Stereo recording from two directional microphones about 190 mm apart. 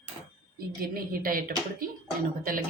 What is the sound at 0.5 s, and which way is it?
A woman's voice, 50° right (ahead or behind).